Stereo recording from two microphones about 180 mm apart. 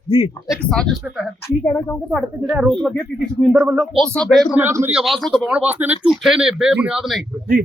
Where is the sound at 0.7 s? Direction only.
5° left (ahead or behind).